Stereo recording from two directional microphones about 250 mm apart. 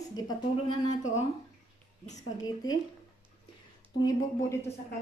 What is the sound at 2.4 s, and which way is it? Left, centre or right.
Speech, centre.